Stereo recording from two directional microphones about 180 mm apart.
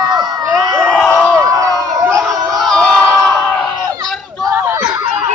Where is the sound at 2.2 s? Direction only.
Centre (ahead or behind).